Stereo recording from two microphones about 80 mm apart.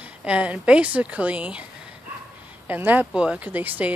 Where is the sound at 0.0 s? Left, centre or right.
Centre.